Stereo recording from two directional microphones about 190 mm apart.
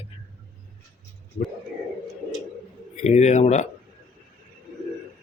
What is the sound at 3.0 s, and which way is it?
Speech, 35° left (ahead or behind).